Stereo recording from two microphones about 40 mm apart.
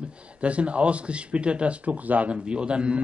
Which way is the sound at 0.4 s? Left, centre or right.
Right.